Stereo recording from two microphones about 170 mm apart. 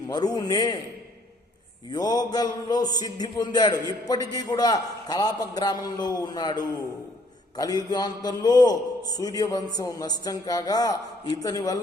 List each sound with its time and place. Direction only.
0.1 s a man's voice: 25° left (ahead or behind)
1.9 s a man's voice: 25° left (ahead or behind)